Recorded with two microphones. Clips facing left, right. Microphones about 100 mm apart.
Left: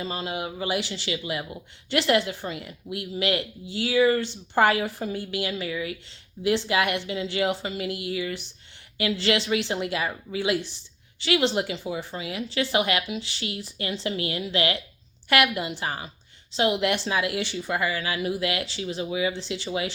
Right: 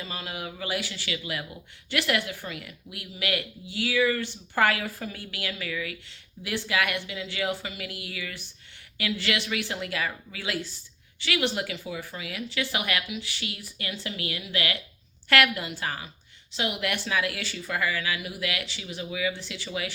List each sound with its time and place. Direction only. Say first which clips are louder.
0.0 s a woman's voice: left 6 dB; 30° left (ahead or behind)
15.3 s a woman's voice: left 1 dB; 20° left (ahead or behind)